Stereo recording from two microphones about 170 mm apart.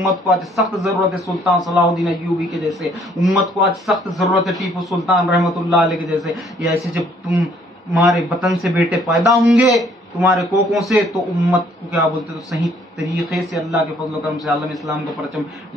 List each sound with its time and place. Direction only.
0.0 s speech: centre (ahead or behind)